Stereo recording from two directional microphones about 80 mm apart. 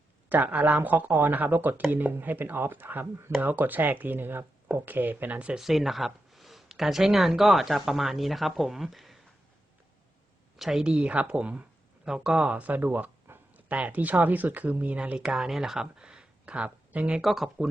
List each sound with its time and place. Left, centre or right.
0.3 s speech: right
5.5 s speech: centre
10.7 s a woman's voice: centre
17.2 s speech: centre